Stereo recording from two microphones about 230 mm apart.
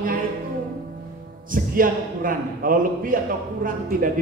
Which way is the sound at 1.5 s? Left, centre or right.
Right.